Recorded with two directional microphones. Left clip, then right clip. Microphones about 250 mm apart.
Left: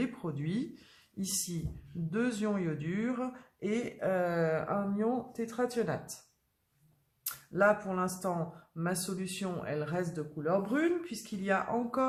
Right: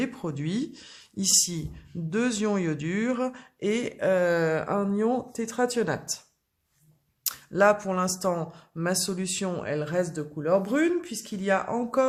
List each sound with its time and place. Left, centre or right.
0.0 s speech: right
7.3 s speech: right